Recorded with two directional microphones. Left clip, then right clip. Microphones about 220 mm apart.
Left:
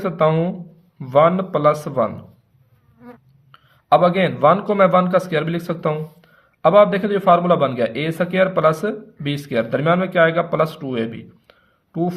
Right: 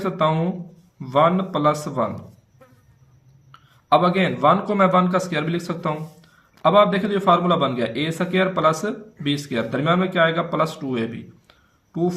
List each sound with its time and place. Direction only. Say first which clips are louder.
0.0 s a man's voice: left 3 dB; 45° left (ahead or behind)
3.5 s a man's voice: left 2 dB; 50° left (ahead or behind)